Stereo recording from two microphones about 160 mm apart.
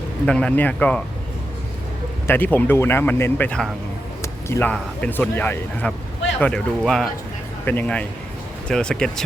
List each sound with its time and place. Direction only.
0.3 s speech: 5° left (ahead or behind)
2.2 s speech: 10° left (ahead or behind)
4.2 s a sound: 15° left (ahead or behind)
4.7 s speech: 10° left (ahead or behind)